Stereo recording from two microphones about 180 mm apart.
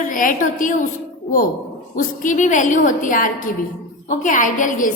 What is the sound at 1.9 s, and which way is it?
A woman's voice, 45° left (ahead or behind).